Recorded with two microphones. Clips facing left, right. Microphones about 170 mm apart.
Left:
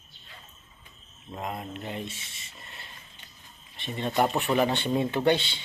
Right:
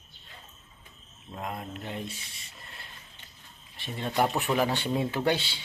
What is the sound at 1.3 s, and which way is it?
Speech, centre (ahead or behind).